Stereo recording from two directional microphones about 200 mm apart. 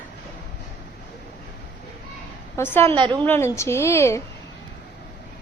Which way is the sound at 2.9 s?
25° right (ahead or behind).